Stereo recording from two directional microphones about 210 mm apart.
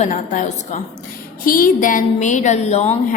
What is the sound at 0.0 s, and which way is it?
A woman's voice, 35° left (ahead or behind).